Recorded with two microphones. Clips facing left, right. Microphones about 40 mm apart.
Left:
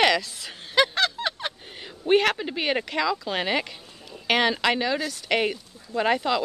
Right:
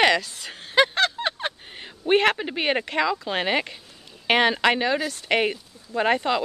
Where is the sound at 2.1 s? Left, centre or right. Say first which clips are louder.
Right 1 dB; centre.